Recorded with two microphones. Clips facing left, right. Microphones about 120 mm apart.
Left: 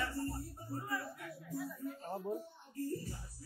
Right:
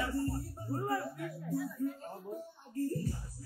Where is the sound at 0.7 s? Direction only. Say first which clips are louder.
Right 7 dB; 50° right (ahead or behind).